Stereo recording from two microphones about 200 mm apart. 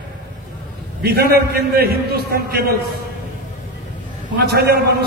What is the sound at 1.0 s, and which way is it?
A man's voice, 50° right (ahead or behind).